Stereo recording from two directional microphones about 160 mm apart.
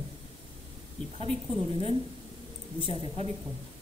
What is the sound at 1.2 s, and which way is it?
Speech, 35° right (ahead or behind).